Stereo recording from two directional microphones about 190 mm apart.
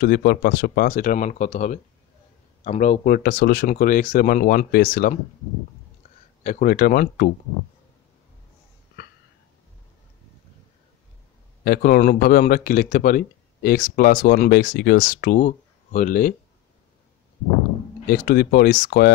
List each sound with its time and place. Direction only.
0.0 s speech: 55° left (ahead or behind)
6.4 s speech: 45° left (ahead or behind)
11.6 s speech: 50° left (ahead or behind)
18.0 s speech: 50° left (ahead or behind)